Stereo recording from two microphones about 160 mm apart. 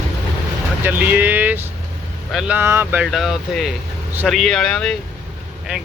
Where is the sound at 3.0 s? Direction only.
Centre (ahead or behind).